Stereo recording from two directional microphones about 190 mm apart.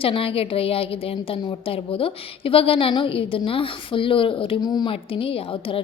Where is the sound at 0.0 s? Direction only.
30° left (ahead or behind).